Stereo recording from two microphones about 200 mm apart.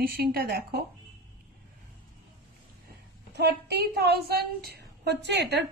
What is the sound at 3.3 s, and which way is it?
A woman's voice, 55° right (ahead or behind).